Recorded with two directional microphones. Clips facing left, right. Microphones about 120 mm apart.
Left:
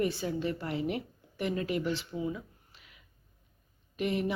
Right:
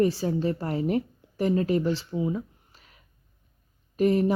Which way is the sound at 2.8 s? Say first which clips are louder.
Right 3 dB; 40° right (ahead or behind).